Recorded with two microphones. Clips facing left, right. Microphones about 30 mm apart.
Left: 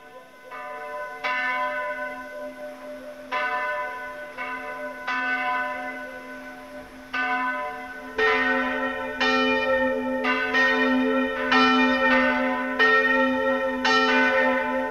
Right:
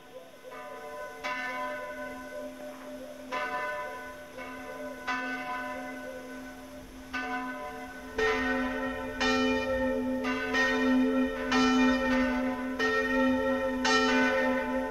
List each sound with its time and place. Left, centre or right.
0.9 s church bell: left
3.3 s church bell: left
4.4 s church bell: left
5.0 s church bell: left
7.1 s church bell: left
8.2 s church bell: left
10.5 s church bell: left
10.8 s church bell: left